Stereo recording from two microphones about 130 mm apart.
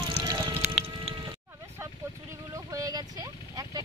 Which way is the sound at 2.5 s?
25° right (ahead or behind).